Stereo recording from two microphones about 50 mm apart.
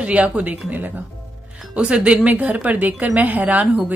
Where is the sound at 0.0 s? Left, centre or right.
Right.